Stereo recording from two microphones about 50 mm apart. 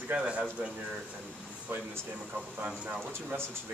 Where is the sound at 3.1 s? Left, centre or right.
Right.